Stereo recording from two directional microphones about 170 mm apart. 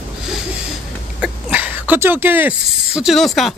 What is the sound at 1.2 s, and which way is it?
Speech, 10° right (ahead or behind).